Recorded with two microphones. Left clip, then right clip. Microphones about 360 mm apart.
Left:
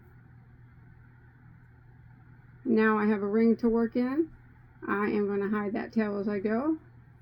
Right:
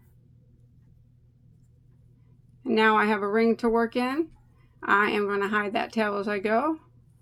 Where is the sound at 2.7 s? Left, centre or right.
Centre.